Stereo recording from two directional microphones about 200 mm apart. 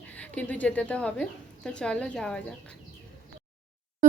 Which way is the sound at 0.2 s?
5° left (ahead or behind).